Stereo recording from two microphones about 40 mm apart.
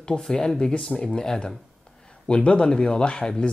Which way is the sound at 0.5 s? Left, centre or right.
Centre.